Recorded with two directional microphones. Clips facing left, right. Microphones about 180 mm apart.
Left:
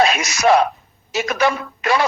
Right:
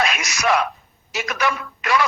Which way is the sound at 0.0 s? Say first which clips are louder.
Left 6 dB; 30° left (ahead or behind).